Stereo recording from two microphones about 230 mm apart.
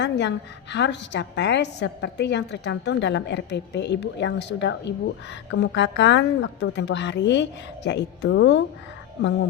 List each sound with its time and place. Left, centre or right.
0.0 s a woman's voice: left